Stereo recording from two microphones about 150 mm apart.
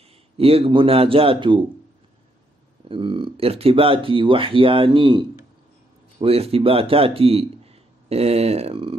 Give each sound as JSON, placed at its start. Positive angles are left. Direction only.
{"t": 0.4, "sound": "speech", "side_deg": -40}
{"t": 2.9, "sound": "speech", "side_deg": -35}
{"t": 6.2, "sound": "a man's voice", "side_deg": -40}